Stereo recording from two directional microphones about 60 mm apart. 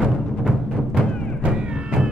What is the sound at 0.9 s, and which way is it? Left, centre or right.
Music, centre.